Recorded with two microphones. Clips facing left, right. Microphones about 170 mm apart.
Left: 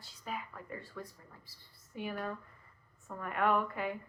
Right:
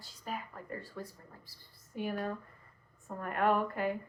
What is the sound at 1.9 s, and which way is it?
A woman's voice, 40° right (ahead or behind).